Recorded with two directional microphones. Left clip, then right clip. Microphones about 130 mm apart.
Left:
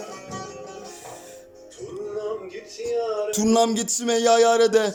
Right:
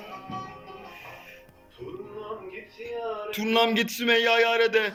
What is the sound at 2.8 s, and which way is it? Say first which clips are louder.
Speech: left 8 dB; 40° left (ahead or behind).